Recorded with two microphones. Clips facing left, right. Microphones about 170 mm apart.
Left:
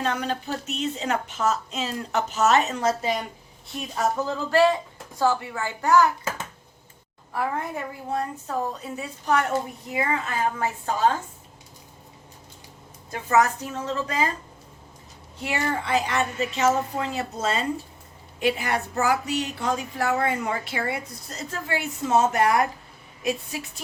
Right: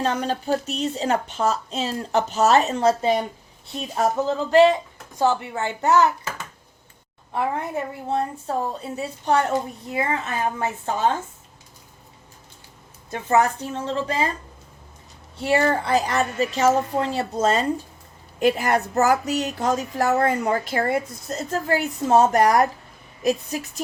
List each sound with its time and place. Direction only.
0.0 s a woman's voice: 35° right (ahead or behind)
7.3 s a woman's voice: 25° right (ahead or behind)
13.1 s a woman's voice: 30° right (ahead or behind)
15.4 s a woman's voice: 35° right (ahead or behind)